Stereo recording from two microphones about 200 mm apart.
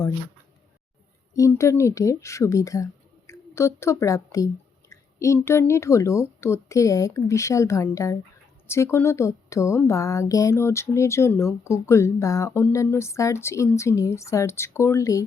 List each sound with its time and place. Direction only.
1.3 s a woman's voice: 15° left (ahead or behind)